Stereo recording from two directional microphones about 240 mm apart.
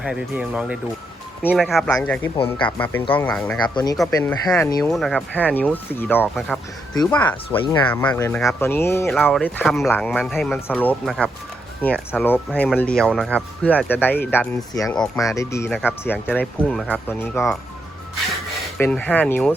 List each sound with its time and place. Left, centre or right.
0.0 s speech: centre
2.3 s speech: left
2.6 s speech: centre
3.6 s speech: centre
9.0 s speech: centre
18.8 s speech: centre